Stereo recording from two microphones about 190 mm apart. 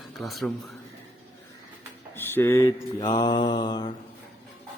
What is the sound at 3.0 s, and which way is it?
Mantra, 25° left (ahead or behind).